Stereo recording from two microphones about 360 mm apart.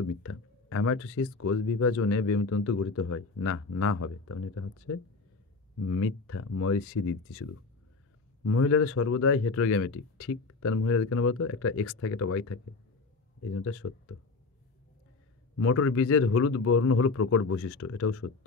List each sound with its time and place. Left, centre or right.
0.0 s speech: left
15.5 s speech: left